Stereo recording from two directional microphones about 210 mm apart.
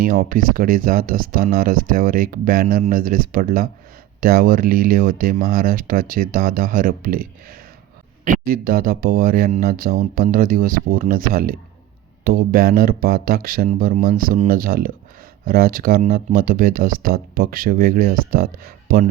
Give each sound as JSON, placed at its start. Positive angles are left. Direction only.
{"t": 0.0, "sound": "speech", "side_deg": -45}